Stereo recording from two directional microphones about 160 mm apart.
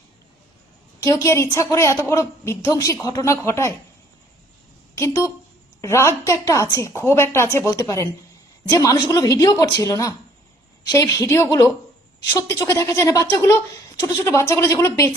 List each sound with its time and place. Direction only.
0.9 s a woman's voice: 20° left (ahead or behind)
4.9 s a woman's voice: 20° left (ahead or behind)